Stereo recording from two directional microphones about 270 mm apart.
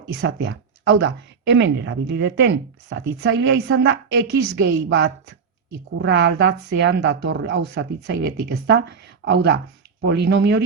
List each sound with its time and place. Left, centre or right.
0.1 s speech: right